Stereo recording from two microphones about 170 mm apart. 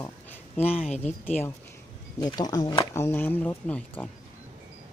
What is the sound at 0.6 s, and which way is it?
Speech, 40° left (ahead or behind).